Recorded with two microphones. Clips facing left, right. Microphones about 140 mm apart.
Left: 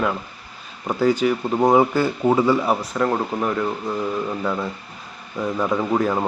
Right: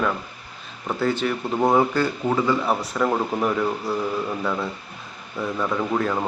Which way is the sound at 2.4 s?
5° left (ahead or behind).